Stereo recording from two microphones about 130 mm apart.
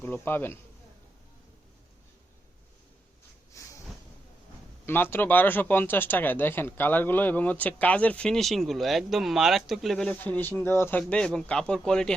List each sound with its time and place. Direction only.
0.0 s speech: 15° left (ahead or behind)
3.6 s a sound: 25° left (ahead or behind)
5.1 s speech: 15° left (ahead or behind)